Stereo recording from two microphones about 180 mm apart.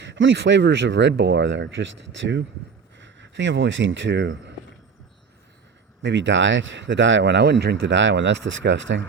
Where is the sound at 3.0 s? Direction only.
90° right.